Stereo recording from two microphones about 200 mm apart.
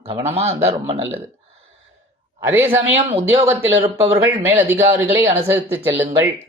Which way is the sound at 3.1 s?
25° right (ahead or behind).